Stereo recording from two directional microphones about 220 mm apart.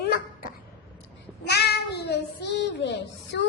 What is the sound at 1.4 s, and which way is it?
A child's voice, 50° left (ahead or behind).